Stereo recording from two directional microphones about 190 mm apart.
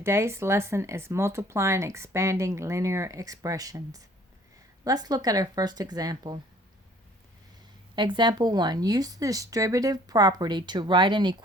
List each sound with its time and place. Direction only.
0.0 s speech: 15° right (ahead or behind)
7.9 s speech: 25° right (ahead or behind)